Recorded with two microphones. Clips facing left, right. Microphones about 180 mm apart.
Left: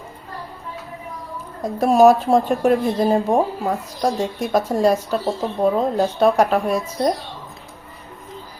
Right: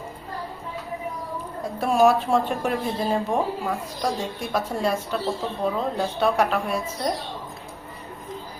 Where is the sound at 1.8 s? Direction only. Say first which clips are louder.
Left 6 dB; 40° left (ahead or behind).